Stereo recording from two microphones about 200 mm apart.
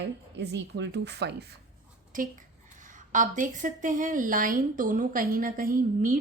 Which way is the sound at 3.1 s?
40° right (ahead or behind).